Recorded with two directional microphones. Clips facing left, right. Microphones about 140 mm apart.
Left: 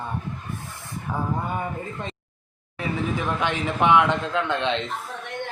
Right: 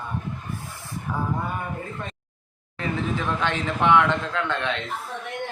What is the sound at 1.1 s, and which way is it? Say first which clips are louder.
Speech: even; 15° left (ahead or behind).